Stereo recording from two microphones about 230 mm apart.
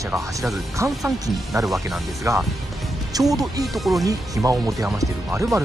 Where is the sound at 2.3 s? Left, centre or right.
Centre.